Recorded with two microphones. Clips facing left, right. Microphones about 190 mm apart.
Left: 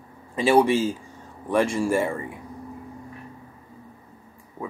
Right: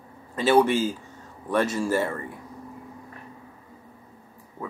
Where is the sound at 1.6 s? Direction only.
25° left (ahead or behind).